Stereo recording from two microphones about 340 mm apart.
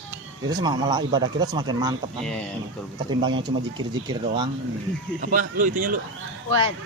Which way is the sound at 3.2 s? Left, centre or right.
Centre.